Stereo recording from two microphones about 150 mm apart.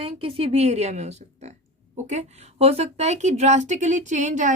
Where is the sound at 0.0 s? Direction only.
40° right (ahead or behind).